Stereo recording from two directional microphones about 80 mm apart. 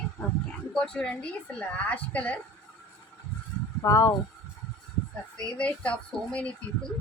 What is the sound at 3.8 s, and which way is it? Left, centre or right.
Speech, left.